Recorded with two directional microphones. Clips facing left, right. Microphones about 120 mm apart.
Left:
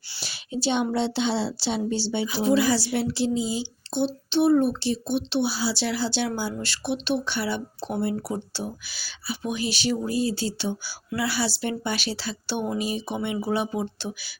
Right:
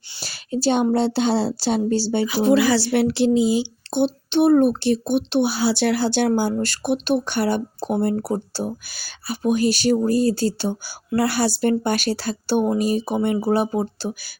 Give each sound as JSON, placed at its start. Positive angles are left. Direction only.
{"t": 0.2, "sound": "speech", "side_deg": -40}
{"t": 2.2, "sound": "speech", "side_deg": -70}